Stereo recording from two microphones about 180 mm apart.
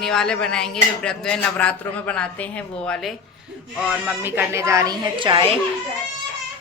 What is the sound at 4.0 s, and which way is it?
A woman's voice, 10° right (ahead or behind).